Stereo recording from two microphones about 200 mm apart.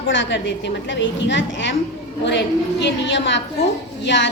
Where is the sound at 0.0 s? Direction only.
70° left (ahead or behind).